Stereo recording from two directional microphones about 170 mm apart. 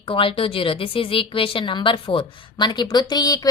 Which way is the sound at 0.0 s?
30° left (ahead or behind).